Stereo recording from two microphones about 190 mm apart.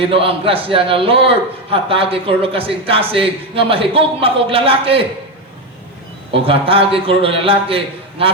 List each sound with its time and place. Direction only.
0.0 s a man's voice: 30° right (ahead or behind)
6.3 s a man's voice: 30° right (ahead or behind)